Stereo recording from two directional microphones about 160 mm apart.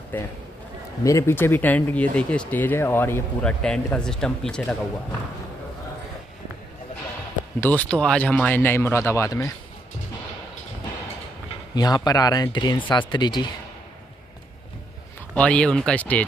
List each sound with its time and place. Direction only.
0.1 s speech: 15° left (ahead or behind)
7.6 s speech: 10° left (ahead or behind)
11.7 s speech: 25° left (ahead or behind)
15.3 s speech: 5° left (ahead or behind)